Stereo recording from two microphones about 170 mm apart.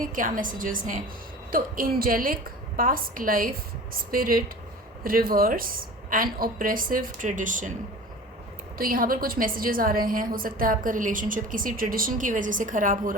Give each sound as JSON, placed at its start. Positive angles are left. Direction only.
{"t": 0.0, "sound": "a woman's voice", "side_deg": -55}
{"t": 8.8, "sound": "a woman's voice", "side_deg": -55}